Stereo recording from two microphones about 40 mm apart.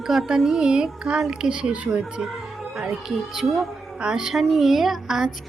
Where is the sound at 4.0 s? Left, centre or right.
Centre.